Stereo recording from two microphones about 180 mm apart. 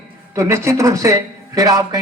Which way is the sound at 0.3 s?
15° right (ahead or behind).